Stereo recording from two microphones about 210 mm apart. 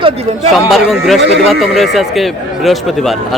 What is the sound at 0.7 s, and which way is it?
Speech, centre (ahead or behind).